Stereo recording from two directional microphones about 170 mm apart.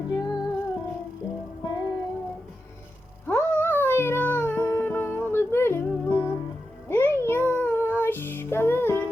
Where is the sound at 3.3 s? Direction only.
10° left (ahead or behind).